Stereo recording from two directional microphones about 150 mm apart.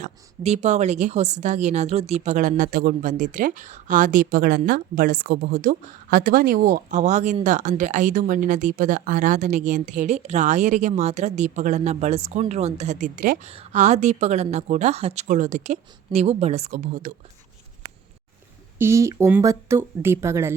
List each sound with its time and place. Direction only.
0.0 s a woman's voice: 50° right (ahead or behind)
18.8 s speech: 20° right (ahead or behind)